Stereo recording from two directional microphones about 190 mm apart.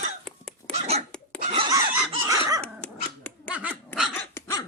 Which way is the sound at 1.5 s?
25° right (ahead or behind).